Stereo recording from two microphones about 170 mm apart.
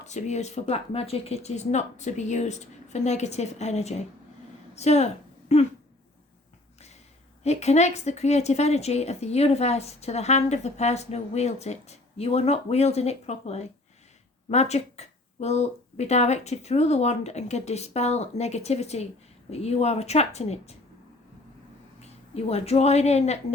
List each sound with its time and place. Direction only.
0.0 s a woman's voice: 45° left (ahead or behind)
7.4 s a woman's voice: 40° left (ahead or behind)
22.0 s speech: 40° left (ahead or behind)